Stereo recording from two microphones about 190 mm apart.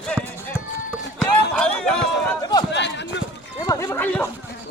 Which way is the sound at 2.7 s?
65° left (ahead or behind).